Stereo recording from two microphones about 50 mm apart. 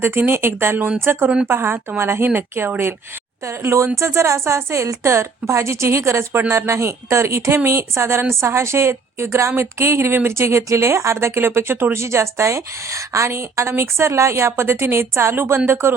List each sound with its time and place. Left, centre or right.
0.3 s speech: right
3.4 s speech: right